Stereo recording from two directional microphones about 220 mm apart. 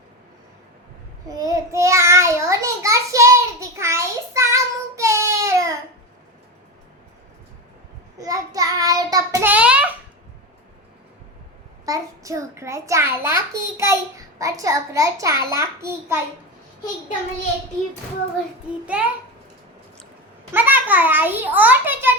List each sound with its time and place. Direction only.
1.3 s child singing: 15° right (ahead or behind)
8.2 s child singing: 15° right (ahead or behind)
11.9 s a child's voice: 15° right (ahead or behind)
18.9 s a child's voice: 5° right (ahead or behind)
20.5 s a child's voice: 10° right (ahead or behind)